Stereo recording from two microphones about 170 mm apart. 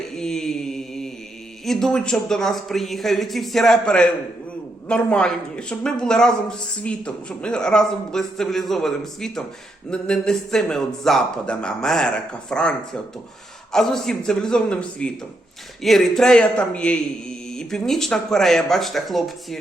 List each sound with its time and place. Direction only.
0.1 s mantra: 5° left (ahead or behind)
1.6 s speech: centre (ahead or behind)
13.7 s speech: 5° left (ahead or behind)